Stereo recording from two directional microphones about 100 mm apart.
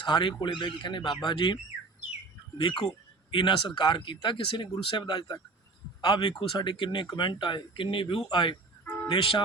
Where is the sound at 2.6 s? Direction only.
55° left (ahead or behind).